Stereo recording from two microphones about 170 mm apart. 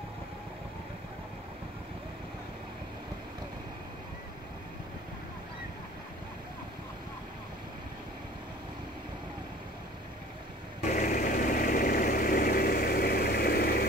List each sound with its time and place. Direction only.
10.8 s vehicle: 50° left (ahead or behind)